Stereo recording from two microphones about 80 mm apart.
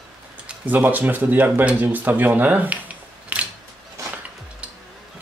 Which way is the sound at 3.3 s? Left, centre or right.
Centre.